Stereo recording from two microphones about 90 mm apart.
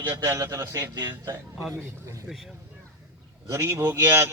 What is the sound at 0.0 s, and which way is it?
A man's voice, 25° right (ahead or behind).